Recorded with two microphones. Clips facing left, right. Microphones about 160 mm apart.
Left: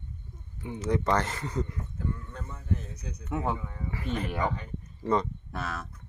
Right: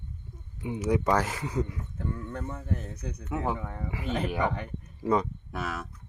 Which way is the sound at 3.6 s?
65° right (ahead or behind).